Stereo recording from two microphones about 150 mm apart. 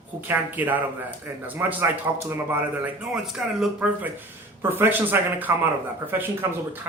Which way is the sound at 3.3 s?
5° right (ahead or behind).